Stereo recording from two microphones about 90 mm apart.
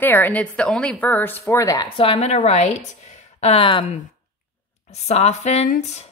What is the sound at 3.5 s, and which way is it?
Speech, 75° left (ahead or behind).